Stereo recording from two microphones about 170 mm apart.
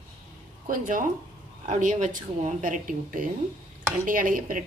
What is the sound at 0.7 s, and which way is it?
A woman's voice, 50° right (ahead or behind).